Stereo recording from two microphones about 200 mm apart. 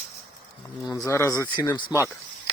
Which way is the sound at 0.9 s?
15° left (ahead or behind).